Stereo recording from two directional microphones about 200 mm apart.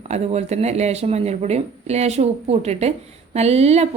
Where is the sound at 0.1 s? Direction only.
35° right (ahead or behind).